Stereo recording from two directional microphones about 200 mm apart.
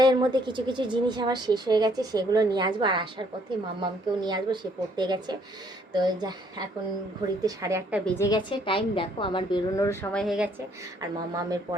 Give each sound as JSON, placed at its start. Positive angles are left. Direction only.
{"t": 0.0, "sound": "a woman's voice", "side_deg": -20}
{"t": 8.0, "sound": "a woman's voice", "side_deg": 15}
{"t": 11.3, "sound": "a woman's voice", "side_deg": -15}